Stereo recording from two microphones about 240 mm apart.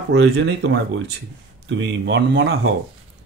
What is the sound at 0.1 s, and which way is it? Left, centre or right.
Speech, right.